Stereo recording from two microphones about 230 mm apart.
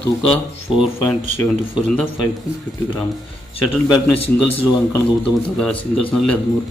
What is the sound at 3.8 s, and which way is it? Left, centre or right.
A man's voice, centre.